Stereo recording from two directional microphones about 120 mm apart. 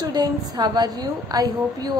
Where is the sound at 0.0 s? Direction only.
35° right (ahead or behind).